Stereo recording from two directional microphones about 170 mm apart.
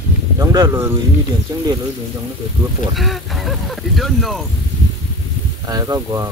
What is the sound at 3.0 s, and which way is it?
Speech, centre (ahead or behind).